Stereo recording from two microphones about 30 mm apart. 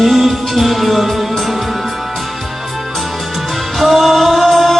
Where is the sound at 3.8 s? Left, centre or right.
Centre.